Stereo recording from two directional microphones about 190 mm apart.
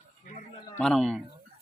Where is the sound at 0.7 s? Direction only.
5° left (ahead or behind).